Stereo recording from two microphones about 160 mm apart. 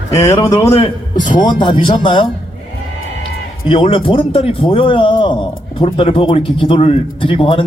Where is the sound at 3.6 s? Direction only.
35° left (ahead or behind).